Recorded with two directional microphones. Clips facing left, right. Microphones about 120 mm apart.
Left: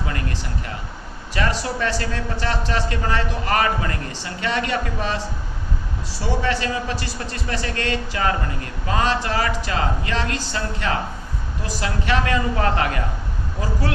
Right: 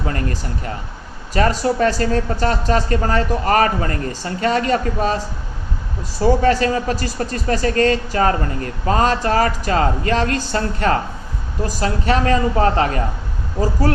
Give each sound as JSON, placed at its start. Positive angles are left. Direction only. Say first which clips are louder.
{"t": 0.1, "sound": "a man's voice", "louder": "right 4 dB", "side_deg": -40}
{"t": 6.2, "sound": "speech", "louder": "right 8 dB", "side_deg": -45}